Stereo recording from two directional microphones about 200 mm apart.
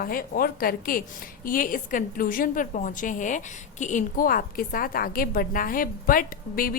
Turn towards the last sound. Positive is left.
turn(degrees=45)  # may be behind; listen again after turning